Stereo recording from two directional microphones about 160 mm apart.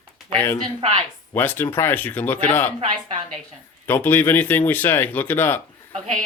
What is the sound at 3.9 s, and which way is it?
Speech, 15° left (ahead or behind).